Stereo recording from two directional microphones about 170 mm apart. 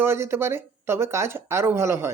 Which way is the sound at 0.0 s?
15° right (ahead or behind).